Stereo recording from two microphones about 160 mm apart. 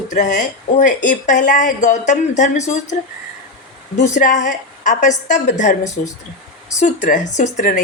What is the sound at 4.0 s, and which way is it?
A woman's voice, 45° left (ahead or behind).